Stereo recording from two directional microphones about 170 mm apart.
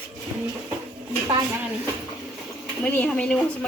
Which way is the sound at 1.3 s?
20° right (ahead or behind).